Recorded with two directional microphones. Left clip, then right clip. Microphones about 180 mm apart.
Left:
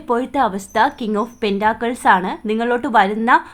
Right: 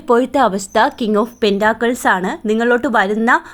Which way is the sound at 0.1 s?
30° right (ahead or behind).